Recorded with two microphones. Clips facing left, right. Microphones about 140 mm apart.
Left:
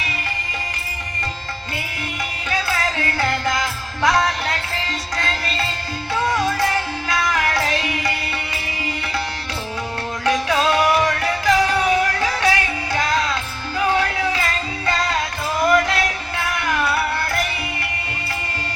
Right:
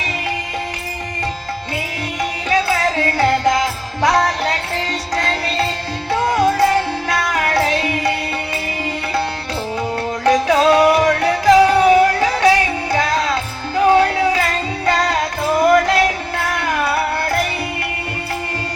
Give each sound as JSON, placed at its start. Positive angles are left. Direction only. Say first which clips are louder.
{"t": 2.5, "sound": "music", "louder": "right 6 dB", "side_deg": -35}
{"t": 10.2, "sound": "music", "louder": "right 6 dB", "side_deg": -35}